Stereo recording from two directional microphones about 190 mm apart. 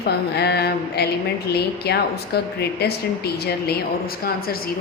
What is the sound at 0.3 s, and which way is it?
A woman's voice, 60° left (ahead or behind).